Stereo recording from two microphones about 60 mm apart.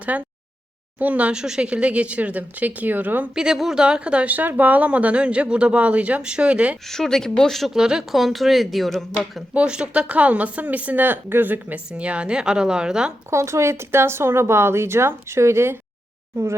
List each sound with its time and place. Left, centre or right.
0.1 s a woman's voice: right
1.3 s a woman's voice: centre; by 3.2 s right
3.3 s a woman's voice: centre
6.8 s speech: centre
7.8 s speech: centre
9.6 s a woman's voice: centre
11.9 s a woman's voice: right
13.3 s speech: right